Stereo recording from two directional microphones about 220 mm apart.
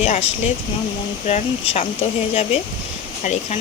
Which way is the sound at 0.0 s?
30° left (ahead or behind).